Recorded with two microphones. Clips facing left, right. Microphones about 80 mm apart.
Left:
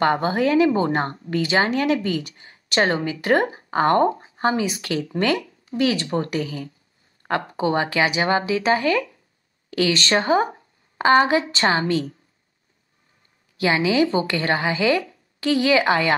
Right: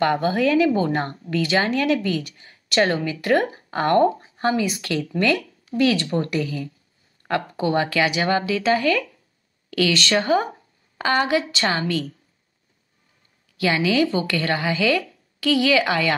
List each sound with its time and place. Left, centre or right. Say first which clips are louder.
0.0 s a woman's voice: even; left
9.9 s a woman's voice: left 1 dB; left
13.6 s a woman's voice: left 1 dB; left